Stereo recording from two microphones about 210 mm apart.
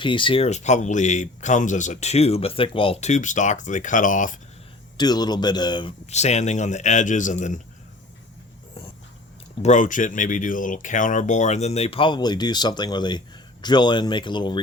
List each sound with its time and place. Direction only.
0.0 s speech: 25° left (ahead or behind)
4.9 s speech: 20° left (ahead or behind); by 7.6 s 35° left (ahead or behind)
9.6 s speech: 40° left (ahead or behind); by 14.6 s 20° left (ahead or behind)